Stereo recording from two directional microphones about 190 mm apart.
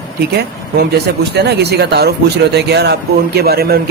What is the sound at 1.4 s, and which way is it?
Speech, 60° right (ahead or behind).